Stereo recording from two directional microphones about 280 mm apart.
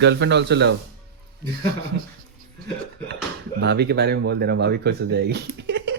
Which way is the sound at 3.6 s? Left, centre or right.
Right.